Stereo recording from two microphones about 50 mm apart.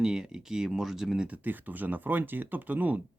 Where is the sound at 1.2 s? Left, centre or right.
Right.